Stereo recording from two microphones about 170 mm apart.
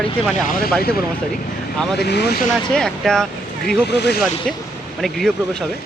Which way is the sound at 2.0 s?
80° left.